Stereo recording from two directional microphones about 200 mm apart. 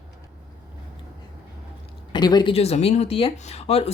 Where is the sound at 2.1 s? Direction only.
20° left (ahead or behind).